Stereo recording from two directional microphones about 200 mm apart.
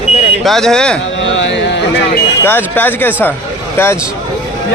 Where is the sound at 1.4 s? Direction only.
65° left (ahead or behind).